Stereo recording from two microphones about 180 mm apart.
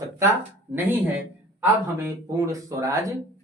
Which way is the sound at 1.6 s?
15° right (ahead or behind).